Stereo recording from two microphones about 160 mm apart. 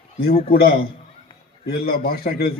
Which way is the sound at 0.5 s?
75° left (ahead or behind).